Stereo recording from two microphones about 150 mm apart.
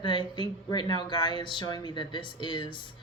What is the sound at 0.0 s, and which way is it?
Speech, 30° left (ahead or behind).